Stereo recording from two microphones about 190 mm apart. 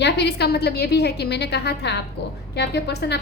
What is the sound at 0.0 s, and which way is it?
A woman's voice, 65° left (ahead or behind).